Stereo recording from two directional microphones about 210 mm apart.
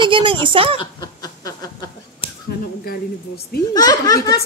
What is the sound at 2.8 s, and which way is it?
Speech, 45° left (ahead or behind).